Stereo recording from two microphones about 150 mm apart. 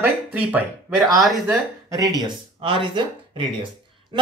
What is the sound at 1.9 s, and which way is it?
Speech, 25° right (ahead or behind).